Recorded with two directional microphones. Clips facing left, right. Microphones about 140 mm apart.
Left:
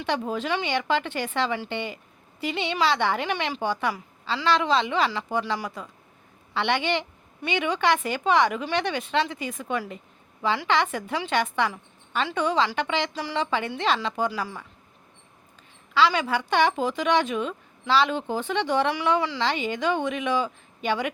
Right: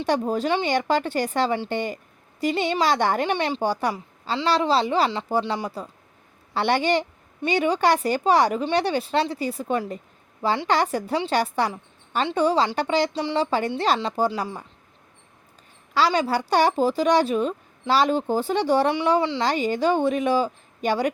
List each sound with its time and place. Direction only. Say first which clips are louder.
0.0 s speech: right 5 dB; 40° right (ahead or behind)
16.0 s speech: right 1 dB; 40° right (ahead or behind)